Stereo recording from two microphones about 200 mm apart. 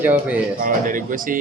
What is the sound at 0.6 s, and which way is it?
Speech, 40° right (ahead or behind).